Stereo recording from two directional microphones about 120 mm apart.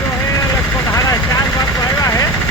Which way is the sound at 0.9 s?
30° left (ahead or behind).